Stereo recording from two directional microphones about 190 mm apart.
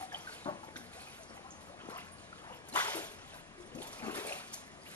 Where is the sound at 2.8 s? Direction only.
10° left (ahead or behind).